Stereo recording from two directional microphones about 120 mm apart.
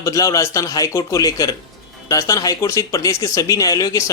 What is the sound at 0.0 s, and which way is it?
A man's voice, 25° left (ahead or behind).